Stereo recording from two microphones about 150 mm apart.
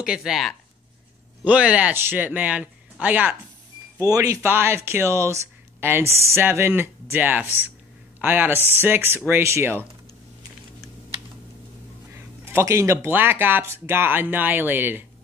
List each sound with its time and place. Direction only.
0.0 s speech: 5° right (ahead or behind)
4.1 s speech: 20° right (ahead or behind)
12.1 s speech: 15° right (ahead or behind)